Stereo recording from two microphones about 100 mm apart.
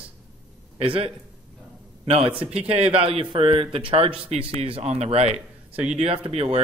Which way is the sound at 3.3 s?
60° right (ahead or behind).